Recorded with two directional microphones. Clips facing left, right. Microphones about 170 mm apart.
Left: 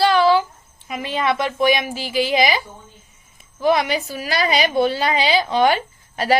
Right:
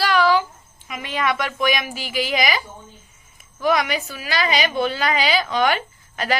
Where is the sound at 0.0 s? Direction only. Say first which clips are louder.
Left 3 dB; 30° left (ahead or behind).